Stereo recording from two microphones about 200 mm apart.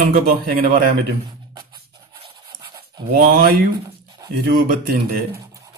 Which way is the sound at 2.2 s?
25° right (ahead or behind).